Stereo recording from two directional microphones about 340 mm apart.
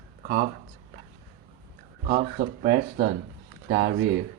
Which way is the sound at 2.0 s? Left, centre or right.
Right.